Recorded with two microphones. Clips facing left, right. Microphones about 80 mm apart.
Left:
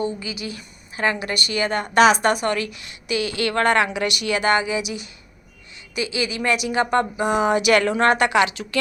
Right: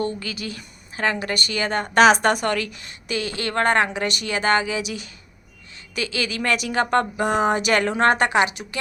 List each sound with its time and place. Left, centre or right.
0.3 s a woman's voice: right